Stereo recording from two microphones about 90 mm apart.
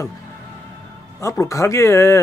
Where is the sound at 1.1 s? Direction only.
35° left (ahead or behind).